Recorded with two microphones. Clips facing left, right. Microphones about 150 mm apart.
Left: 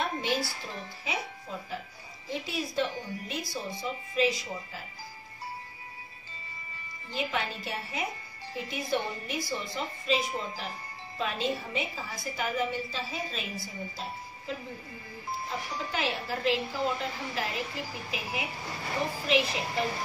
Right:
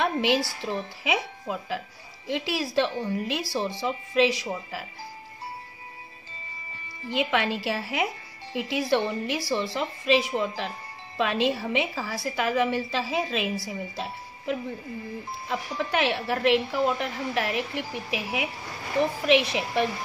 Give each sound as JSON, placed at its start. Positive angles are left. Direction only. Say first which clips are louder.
{"t": 0.0, "sound": "a woman's voice", "louder": "right 6 dB", "side_deg": -85}
{"t": 7.1, "sound": "a woman's voice", "louder": "right 7 dB", "side_deg": -80}
{"t": 8.5, "sound": "a woman's voice", "louder": "right 7 dB", "side_deg": -80}